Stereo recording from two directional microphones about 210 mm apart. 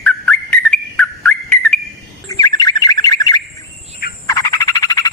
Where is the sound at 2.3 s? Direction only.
20° left (ahead or behind).